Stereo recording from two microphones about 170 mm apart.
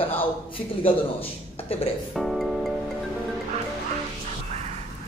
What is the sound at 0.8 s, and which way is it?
Speech, 35° left (ahead or behind).